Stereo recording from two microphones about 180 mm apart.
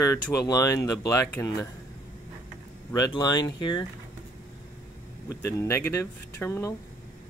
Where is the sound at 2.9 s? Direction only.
20° left (ahead or behind).